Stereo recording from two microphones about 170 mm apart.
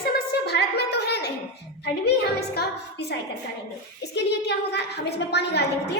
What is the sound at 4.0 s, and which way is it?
A woman's voice, 85° left.